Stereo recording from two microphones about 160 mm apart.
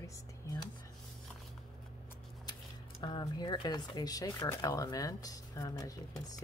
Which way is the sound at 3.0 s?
25° left (ahead or behind).